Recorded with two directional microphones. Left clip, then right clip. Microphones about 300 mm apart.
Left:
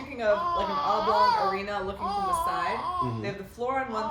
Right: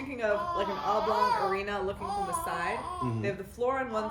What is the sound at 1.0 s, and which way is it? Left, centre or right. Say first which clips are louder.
Speech: left 5 dB; centre.